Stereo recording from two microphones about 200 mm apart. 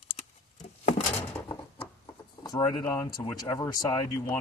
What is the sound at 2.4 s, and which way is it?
Speech, 20° left (ahead or behind).